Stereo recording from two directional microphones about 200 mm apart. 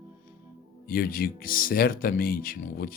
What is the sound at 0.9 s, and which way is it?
Speech, 45° left (ahead or behind).